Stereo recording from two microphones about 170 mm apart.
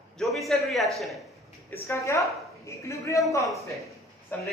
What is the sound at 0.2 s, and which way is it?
A man's voice, centre (ahead or behind).